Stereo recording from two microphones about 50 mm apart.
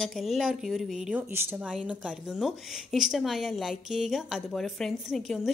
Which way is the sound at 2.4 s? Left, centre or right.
Centre.